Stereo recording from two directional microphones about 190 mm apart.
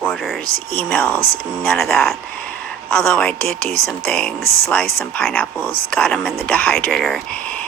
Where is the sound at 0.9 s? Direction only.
10° left (ahead or behind).